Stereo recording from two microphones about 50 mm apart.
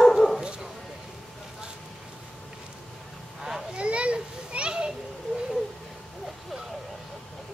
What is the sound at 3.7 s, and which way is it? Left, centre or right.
Children playing, right.